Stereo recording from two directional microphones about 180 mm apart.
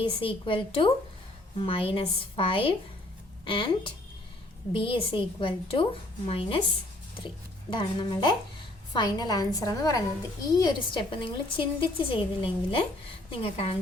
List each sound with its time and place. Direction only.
0.1 s a woman's voice: 30° left (ahead or behind)
7.7 s a woman's voice: 25° left (ahead or behind)